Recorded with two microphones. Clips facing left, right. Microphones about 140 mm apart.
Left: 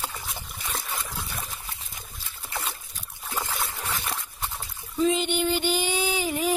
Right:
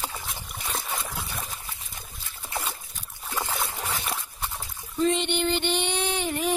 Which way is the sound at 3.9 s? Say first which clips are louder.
Right 1 dB; centre (ahead or behind).